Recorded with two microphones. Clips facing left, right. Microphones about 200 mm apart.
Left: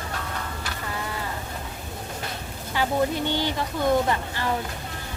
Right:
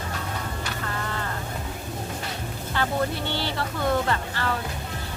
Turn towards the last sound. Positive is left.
turn(degrees=15)  # may be behind; listen again after turning